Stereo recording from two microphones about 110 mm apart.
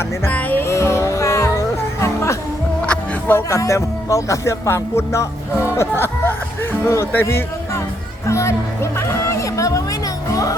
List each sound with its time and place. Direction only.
0.3 s music: 15° left (ahead or behind)
2.8 s speech: 15° left (ahead or behind)
8.3 s music: 25° left (ahead or behind)